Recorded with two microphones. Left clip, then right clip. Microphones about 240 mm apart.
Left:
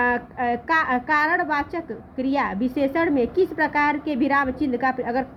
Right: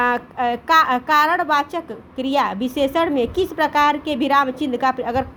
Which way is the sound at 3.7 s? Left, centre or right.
Right.